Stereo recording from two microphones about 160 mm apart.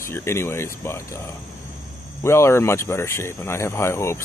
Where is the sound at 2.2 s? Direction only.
15° left (ahead or behind).